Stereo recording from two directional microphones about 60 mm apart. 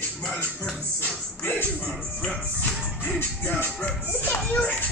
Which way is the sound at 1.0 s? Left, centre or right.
Left.